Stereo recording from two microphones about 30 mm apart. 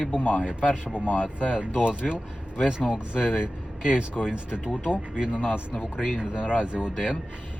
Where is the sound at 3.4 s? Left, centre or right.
Right.